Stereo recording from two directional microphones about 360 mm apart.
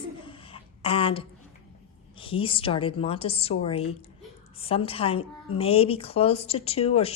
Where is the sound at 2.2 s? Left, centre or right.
Centre.